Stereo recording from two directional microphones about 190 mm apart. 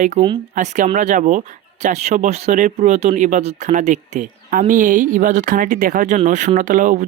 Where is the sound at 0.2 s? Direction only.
40° right (ahead or behind).